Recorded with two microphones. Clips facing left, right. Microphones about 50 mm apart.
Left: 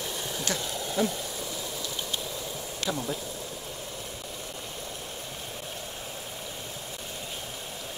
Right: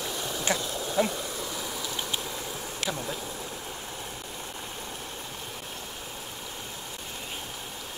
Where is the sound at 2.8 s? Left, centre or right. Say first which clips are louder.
Left 1 dB; centre.